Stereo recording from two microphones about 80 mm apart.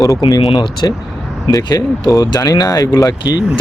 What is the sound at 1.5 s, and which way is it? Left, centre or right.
Speech, left.